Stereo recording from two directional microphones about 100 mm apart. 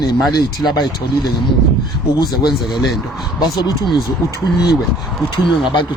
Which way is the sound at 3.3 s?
45° left (ahead or behind).